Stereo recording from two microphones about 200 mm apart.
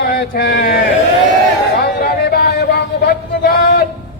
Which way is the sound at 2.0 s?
50° left (ahead or behind).